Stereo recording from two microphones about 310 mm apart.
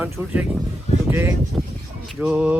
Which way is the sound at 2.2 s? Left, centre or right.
Centre.